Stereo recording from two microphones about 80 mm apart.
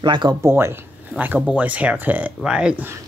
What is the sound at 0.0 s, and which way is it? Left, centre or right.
Speech, right.